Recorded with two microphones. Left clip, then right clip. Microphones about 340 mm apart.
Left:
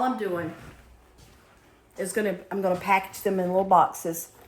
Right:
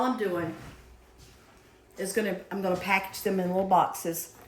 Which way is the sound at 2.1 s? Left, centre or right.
Centre.